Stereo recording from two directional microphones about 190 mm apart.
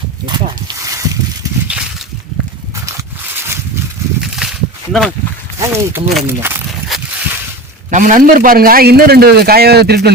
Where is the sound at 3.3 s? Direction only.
10° right (ahead or behind).